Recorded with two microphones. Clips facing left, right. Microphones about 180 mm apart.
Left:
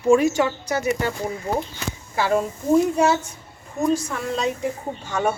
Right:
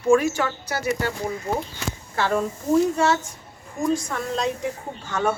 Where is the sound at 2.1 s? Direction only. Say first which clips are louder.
Left 2 dB; 10° left (ahead or behind).